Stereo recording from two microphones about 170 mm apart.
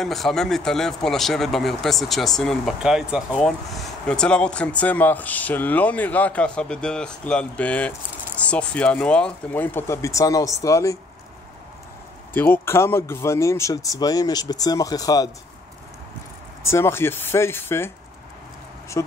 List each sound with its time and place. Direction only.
0.0 s speech: centre (ahead or behind); by 11.0 s 20° left (ahead or behind)
12.4 s speech: 15° left (ahead or behind)
16.6 s speech: 15° left (ahead or behind)
19.0 s speech: 20° left (ahead or behind)